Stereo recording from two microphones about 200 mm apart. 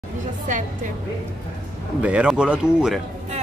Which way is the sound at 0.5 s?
40° right (ahead or behind).